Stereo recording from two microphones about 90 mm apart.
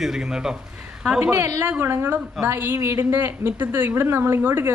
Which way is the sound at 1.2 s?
30° right (ahead or behind).